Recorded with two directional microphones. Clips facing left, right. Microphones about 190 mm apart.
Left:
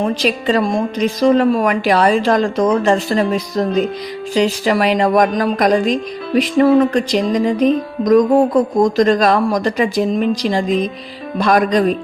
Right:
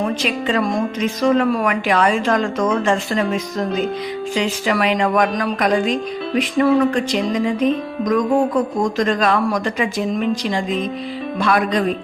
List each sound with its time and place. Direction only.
0.0 s speech: 35° left (ahead or behind)